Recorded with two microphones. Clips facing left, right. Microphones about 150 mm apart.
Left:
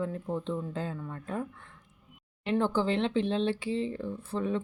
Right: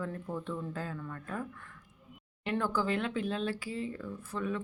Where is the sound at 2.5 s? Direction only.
25° left (ahead or behind).